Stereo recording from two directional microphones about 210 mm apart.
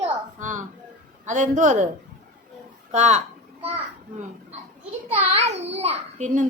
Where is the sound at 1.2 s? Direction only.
35° right (ahead or behind).